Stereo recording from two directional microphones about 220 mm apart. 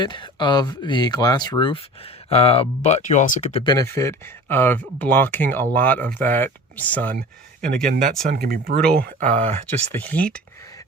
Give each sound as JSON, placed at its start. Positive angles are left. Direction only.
{"t": 0.0, "sound": "speech", "side_deg": 20}
{"t": 3.6, "sound": "speech", "side_deg": 15}
{"t": 7.2, "sound": "speech", "side_deg": -40}
{"t": 9.2, "sound": "speech", "side_deg": -30}
{"t": 9.9, "sound": "speech", "side_deg": 5}